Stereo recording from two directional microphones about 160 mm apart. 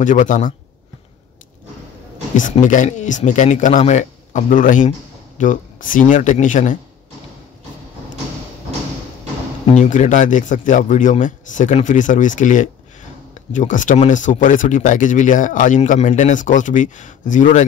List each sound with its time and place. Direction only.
0.0 s speech: 55° left (ahead or behind)
2.3 s speech: 55° left (ahead or behind)
9.8 s speech: 50° left (ahead or behind)